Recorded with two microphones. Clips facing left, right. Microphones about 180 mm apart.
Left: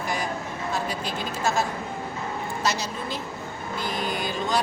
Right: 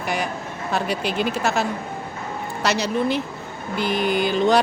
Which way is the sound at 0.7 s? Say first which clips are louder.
Right 6 dB; 70° right (ahead or behind).